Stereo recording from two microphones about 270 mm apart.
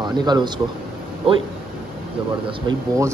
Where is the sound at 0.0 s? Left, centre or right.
Centre.